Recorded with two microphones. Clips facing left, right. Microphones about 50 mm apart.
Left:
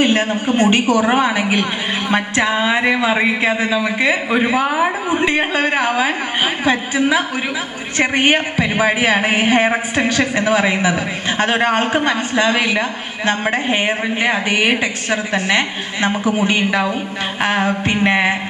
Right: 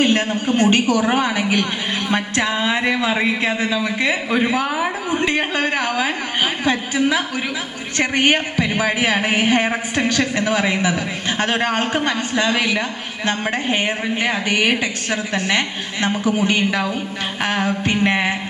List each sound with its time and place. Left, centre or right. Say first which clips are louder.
0.0 s a man's voice: left 2 dB; centre
7.9 s a man's voice: left 2 dB; left